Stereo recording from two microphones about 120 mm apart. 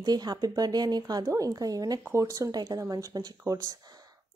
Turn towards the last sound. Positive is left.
turn(degrees=-35)  # may be behind; listen again after turning